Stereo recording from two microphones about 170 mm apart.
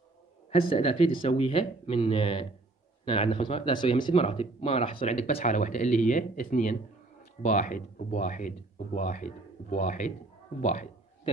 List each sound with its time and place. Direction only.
0.5 s speech: 35° left (ahead or behind)